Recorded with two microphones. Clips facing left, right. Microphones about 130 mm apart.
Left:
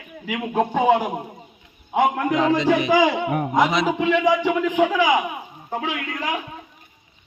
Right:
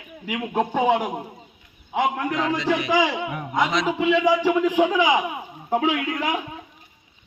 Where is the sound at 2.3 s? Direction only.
20° left (ahead or behind).